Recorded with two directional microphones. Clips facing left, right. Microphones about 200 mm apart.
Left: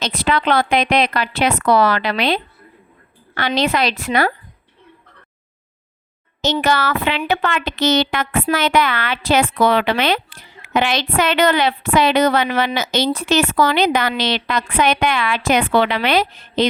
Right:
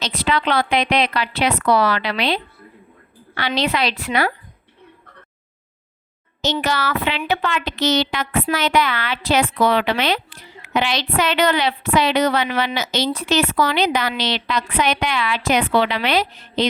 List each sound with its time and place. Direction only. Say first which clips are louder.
0.0 s a woman's voice: left 2 dB; 50° left (ahead or behind)
6.4 s a woman's voice: left 3 dB; 50° left (ahead or behind)